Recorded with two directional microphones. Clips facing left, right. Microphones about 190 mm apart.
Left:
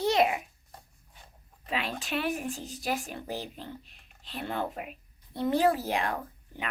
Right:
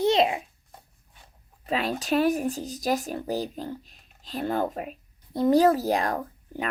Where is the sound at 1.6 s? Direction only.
40° right (ahead or behind).